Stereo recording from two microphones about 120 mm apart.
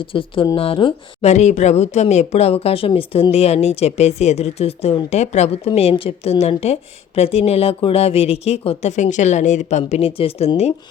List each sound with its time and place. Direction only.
0.0 s speech: 45° left (ahead or behind)
1.2 s speech: 70° left (ahead or behind)
5.1 s speech: 65° left (ahead or behind)